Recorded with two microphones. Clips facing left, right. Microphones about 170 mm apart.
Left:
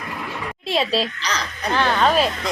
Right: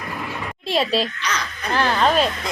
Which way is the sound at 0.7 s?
Centre (ahead or behind).